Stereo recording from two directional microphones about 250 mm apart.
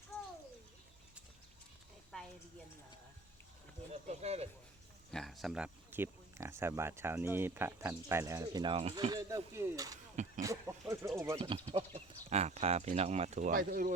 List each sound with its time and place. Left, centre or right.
2.1 s a sound: centre
3.9 s speech: right
5.1 s speech: centre; by 13.9 s right